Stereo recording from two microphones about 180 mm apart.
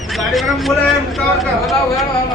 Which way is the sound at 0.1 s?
Centre (ahead or behind).